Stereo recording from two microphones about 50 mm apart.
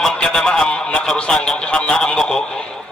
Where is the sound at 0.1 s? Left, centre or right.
Centre.